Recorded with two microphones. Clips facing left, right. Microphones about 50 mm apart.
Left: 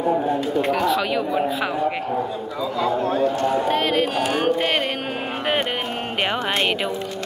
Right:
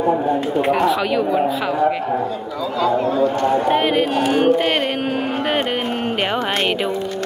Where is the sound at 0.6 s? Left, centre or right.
Right.